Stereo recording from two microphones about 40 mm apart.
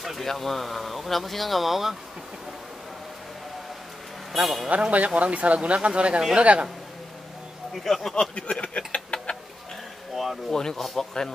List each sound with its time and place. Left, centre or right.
0.0 s speech: centre
4.4 s speech: centre
4.9 s speech: right
7.7 s speech: centre
8.1 s a sound: left
10.1 s a sound: centre
10.5 s a man's voice: centre